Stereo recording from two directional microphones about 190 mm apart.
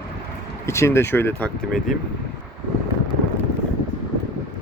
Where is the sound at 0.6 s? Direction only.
15° left (ahead or behind).